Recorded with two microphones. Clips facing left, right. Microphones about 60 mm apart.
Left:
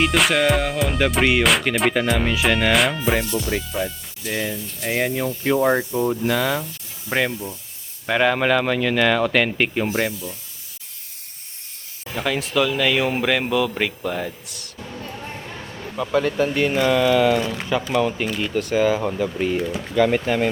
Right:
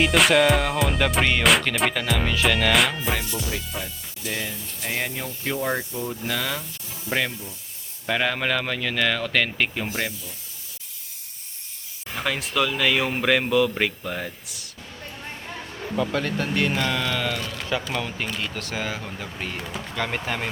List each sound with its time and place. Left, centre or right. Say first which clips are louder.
0.0 s speech: even; centre
2.7 s speech: left 3 dB; centre
4.3 s speech: left 5 dB; centre
12.1 s speech: left 4 dB; centre
16.0 s speech: left 5 dB; centre
17.7 s speech: left 6 dB; centre